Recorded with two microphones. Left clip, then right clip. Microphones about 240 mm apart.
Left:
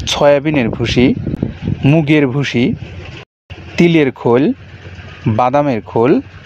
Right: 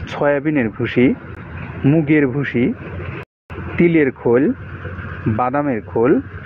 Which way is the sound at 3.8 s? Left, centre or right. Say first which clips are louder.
Left 3 dB; left.